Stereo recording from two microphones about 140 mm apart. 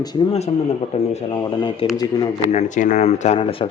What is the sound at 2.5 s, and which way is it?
Speech, 60° left (ahead or behind).